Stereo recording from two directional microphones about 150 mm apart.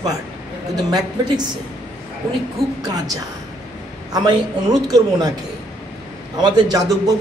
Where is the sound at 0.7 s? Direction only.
25° right (ahead or behind).